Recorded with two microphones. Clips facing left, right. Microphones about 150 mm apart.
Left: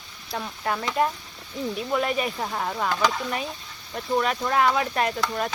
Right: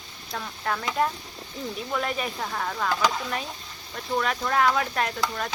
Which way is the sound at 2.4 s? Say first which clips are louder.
Left 2 dB; 15° left (ahead or behind).